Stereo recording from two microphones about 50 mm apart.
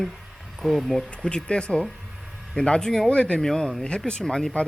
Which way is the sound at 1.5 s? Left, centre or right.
Left.